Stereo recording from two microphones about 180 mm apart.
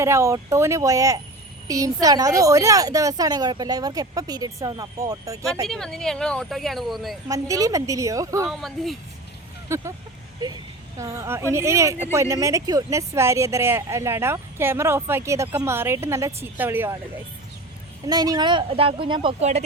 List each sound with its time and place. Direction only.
0.0 s a woman's voice: 15° right (ahead or behind)
5.6 s speech: 5° left (ahead or behind)
7.3 s speech: 20° right (ahead or behind)
8.4 s speech: centre (ahead or behind)
9.6 s speech: 15° right (ahead or behind)
18.0 s a woman's voice: 20° right (ahead or behind); by 19.6 s 35° right (ahead or behind)